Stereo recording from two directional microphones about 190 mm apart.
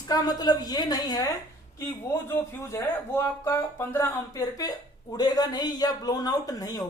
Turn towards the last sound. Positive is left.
turn(degrees=20)  # may be behind; listen again after turning